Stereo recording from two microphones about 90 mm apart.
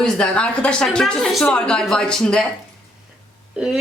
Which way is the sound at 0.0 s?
10° left (ahead or behind).